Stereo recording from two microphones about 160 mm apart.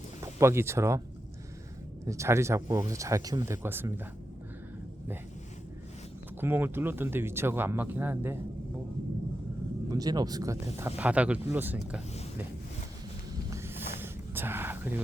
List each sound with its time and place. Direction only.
0.2 s speech: 20° right (ahead or behind)
2.0 s speech: 20° right (ahead or behind)
6.4 s speech: 15° right (ahead or behind)
9.9 s speech: 25° right (ahead or behind)
13.5 s a sound: 15° right (ahead or behind)